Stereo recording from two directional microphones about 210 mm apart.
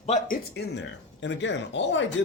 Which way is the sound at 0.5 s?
55° left (ahead or behind).